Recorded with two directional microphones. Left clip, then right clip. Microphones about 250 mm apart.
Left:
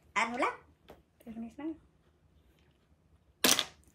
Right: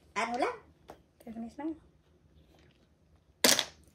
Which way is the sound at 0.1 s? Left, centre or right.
Centre.